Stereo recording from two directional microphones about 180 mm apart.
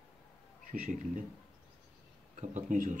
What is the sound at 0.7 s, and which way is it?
Speech, 45° right (ahead or behind).